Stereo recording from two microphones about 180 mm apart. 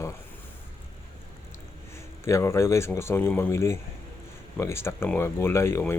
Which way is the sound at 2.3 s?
15° left (ahead or behind).